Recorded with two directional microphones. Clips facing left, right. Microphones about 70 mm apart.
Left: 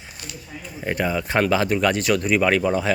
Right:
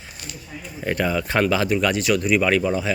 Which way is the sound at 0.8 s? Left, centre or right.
Centre.